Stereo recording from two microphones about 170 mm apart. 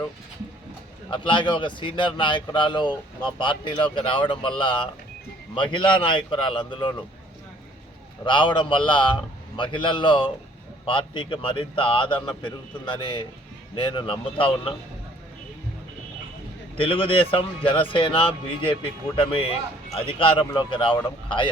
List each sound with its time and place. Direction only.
1.1 s speech: 30° left (ahead or behind)
8.2 s speech: 30° left (ahead or behind)
16.7 s speech: 30° left (ahead or behind)